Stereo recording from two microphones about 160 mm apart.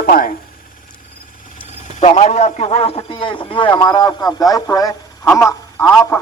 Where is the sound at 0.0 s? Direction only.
65° left (ahead or behind).